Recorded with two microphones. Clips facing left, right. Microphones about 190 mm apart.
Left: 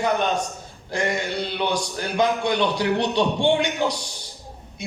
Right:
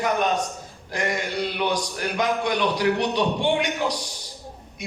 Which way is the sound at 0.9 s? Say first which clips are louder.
Left 2 dB; 30° left (ahead or behind).